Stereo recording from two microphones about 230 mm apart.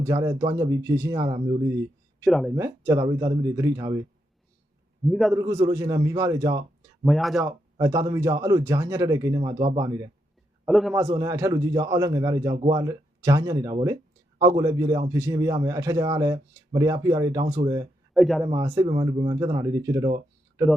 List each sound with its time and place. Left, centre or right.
0.0 s a man's voice: centre
2.2 s speech: centre
2.6 s a man's voice: centre
5.0 s speech: centre
5.3 s a man's voice: centre
7.0 s speech: centre
7.4 s a man's voice: centre
10.7 s speech: centre
10.9 s a man's voice: centre
18.2 s speech: centre
18.4 s a man's voice: centre